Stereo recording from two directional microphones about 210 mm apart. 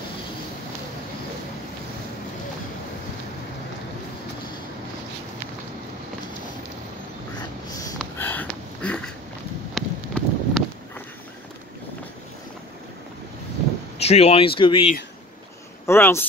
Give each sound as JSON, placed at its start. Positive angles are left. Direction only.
{"t": 8.0, "sound": "a sound", "side_deg": 10}
{"t": 9.8, "sound": "wind", "side_deg": 0}
{"t": 13.9, "sound": "speech", "side_deg": 30}
{"t": 15.9, "sound": "speech", "side_deg": 10}